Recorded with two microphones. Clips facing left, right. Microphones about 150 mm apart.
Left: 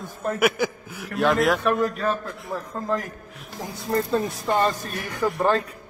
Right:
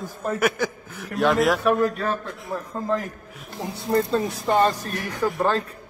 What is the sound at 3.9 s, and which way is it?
Speech, 20° right (ahead or behind).